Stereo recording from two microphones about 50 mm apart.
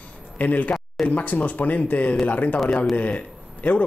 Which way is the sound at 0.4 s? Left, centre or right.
Left.